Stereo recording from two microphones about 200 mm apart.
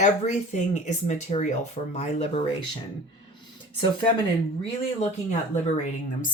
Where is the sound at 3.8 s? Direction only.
25° left (ahead or behind).